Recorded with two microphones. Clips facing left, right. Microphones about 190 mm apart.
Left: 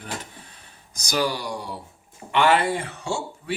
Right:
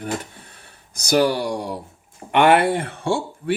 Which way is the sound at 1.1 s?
60° right (ahead or behind).